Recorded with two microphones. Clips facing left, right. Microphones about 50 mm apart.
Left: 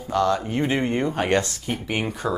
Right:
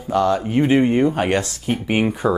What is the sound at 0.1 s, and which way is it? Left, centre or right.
Speech, centre.